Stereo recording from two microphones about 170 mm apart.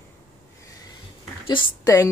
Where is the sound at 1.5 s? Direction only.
25° left (ahead or behind).